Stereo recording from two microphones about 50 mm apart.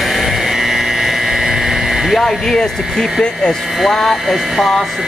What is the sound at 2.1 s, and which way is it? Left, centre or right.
Speech, centre.